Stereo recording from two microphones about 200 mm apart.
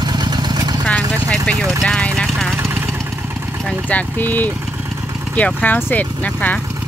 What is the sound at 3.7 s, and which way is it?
Speech, 5° left (ahead or behind).